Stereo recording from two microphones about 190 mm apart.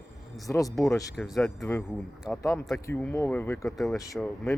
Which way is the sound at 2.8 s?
15° left (ahead or behind).